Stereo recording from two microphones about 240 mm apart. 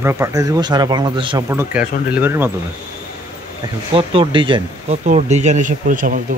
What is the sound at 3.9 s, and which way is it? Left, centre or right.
Speech, right.